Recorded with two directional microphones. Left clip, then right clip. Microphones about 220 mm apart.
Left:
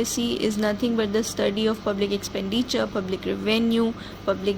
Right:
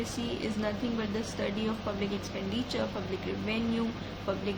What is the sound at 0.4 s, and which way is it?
A woman's voice, 40° left (ahead or behind).